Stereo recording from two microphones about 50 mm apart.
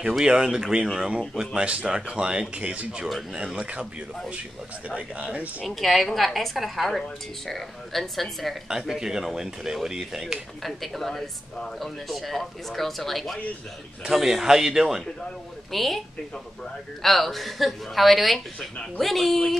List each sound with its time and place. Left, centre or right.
0.2 s speech: centre
4.8 s speech: right
5.8 s speech: centre
8.6 s speech: centre
10.6 s speech: centre
15.7 s speech: centre
17.0 s speech: centre